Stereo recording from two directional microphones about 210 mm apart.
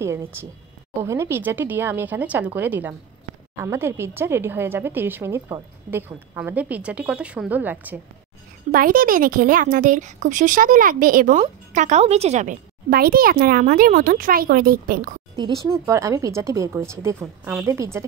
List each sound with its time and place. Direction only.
0.0 s a woman's voice: 15° right (ahead or behind)
8.7 s speech: 40° right (ahead or behind)
15.3 s a woman's voice: 20° right (ahead or behind)